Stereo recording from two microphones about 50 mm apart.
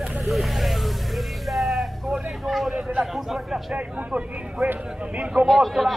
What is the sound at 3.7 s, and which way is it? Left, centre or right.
Speech, right.